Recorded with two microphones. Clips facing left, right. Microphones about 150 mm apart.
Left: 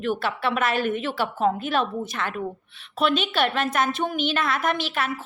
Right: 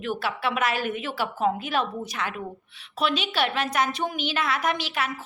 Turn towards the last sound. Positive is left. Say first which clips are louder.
# left 2 dB
turn(degrees=-10)  # may be behind; listen again after turning